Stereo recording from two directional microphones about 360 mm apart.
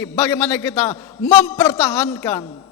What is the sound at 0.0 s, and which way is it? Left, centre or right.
A man's voice, centre.